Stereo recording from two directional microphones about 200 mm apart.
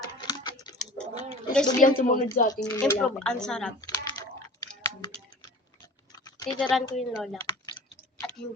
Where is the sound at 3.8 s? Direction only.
15° left (ahead or behind).